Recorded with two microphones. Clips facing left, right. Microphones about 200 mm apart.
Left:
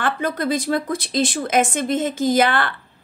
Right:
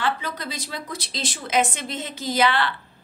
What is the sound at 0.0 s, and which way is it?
Speech, 50° left (ahead or behind).